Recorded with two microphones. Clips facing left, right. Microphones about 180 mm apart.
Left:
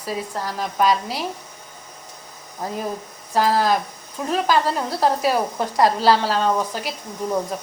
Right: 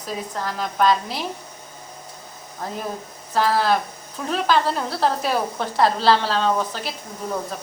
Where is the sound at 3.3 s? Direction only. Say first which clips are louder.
Left 1 dB; 10° left (ahead or behind).